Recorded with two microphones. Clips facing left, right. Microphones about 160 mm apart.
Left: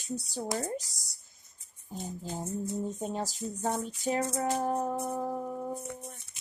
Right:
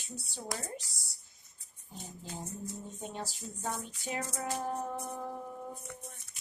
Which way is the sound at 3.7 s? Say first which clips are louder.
Left 8 dB; 45° left (ahead or behind).